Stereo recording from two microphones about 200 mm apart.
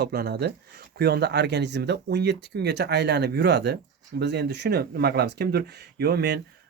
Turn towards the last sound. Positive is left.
turn(degrees=-55)  # may be behind; listen again after turning